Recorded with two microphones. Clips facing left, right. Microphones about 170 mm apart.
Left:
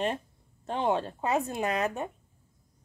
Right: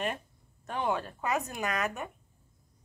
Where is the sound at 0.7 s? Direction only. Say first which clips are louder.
Left 4 dB; 25° left (ahead or behind).